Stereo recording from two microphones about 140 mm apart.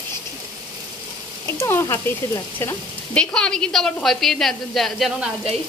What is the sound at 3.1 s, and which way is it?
A woman's voice, 5° left (ahead or behind).